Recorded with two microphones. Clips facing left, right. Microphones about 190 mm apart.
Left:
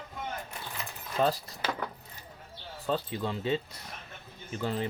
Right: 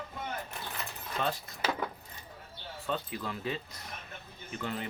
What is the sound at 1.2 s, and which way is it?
Speech, 35° left (ahead or behind).